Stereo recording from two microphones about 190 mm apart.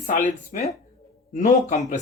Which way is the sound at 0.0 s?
45° left (ahead or behind).